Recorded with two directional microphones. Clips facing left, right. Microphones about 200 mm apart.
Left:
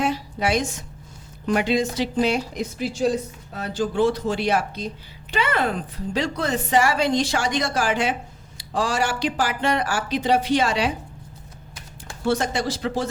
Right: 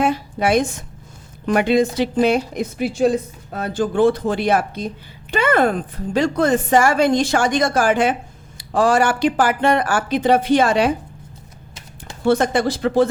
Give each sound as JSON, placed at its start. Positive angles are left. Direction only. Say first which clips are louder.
{"t": 0.0, "sound": "a woman's voice", "louder": "right 5 dB", "side_deg": -55}
{"t": 12.2, "sound": "speech", "louder": "right 6 dB", "side_deg": -55}